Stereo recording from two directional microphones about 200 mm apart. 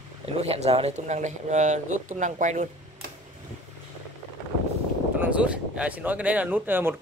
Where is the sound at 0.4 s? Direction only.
30° right (ahead or behind).